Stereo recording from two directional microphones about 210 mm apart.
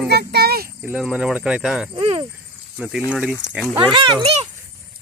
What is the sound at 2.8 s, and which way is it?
Speech, 5° right (ahead or behind).